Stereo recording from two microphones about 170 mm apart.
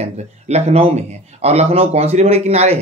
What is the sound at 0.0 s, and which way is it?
Speech, 40° right (ahead or behind).